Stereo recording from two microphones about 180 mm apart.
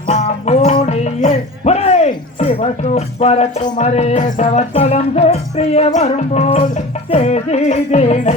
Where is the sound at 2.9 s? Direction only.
35° left (ahead or behind).